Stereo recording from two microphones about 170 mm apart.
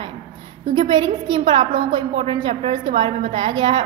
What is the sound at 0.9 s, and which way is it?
A woman's voice, 30° right (ahead or behind).